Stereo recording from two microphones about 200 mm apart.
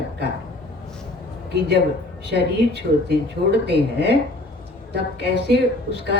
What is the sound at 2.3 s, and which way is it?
Speech, 55° right (ahead or behind).